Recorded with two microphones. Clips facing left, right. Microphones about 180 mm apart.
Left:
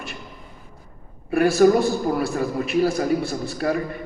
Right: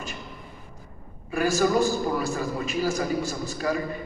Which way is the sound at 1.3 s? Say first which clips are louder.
Left 7 dB; 60° left (ahead or behind).